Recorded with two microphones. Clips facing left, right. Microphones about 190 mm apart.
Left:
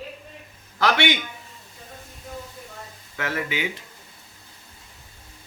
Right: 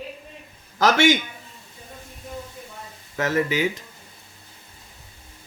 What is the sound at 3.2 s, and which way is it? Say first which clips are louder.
Speech: right 6 dB; 40° right (ahead or behind).